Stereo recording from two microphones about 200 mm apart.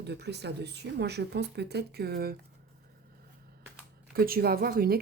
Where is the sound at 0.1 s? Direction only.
55° right (ahead or behind).